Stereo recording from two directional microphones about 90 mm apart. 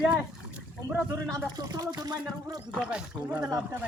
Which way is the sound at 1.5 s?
45° right (ahead or behind).